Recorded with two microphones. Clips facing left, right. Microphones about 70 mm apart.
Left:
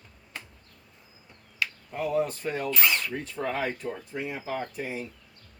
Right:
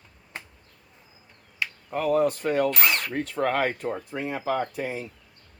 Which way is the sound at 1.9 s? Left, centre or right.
Right.